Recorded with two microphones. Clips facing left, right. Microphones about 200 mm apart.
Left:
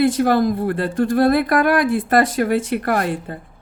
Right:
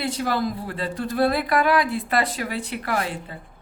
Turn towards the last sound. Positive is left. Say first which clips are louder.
# left 6 dB
turn(degrees=50)  # may be behind; listen again after turning